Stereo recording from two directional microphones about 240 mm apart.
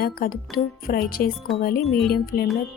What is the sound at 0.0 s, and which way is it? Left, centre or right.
Speech, left.